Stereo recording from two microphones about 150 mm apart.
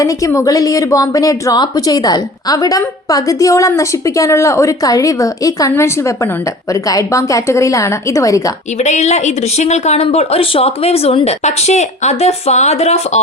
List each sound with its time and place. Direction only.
0.0 s a woman's voice: 20° left (ahead or behind)
8.8 s speech: 50° left (ahead or behind)